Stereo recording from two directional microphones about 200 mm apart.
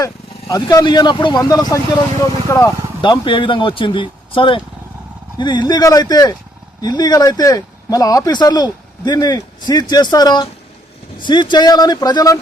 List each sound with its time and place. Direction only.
0.0 s speech: 20° left (ahead or behind)